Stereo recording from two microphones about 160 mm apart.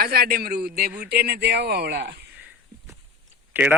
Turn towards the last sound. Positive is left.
turn(degrees=-10)  # may be behind; listen again after turning